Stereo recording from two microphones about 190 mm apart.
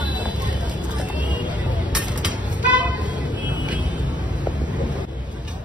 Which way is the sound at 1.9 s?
5° right (ahead or behind).